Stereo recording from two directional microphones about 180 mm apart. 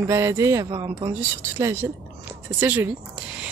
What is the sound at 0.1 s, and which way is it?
Speech, 15° right (ahead or behind).